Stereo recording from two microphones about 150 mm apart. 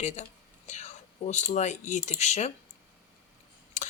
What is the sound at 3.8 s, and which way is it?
Tick-tock, 55° left (ahead or behind).